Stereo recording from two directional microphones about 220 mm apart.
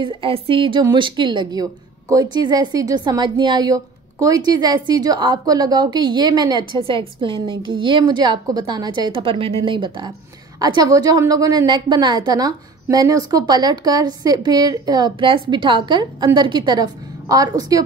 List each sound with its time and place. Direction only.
0.0 s a woman's voice: 25° right (ahead or behind)